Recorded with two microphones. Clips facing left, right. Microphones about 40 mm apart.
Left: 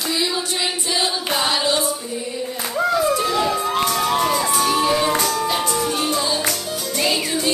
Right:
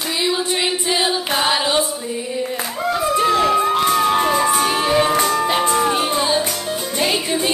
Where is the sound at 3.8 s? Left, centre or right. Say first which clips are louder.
Right 3 dB; right.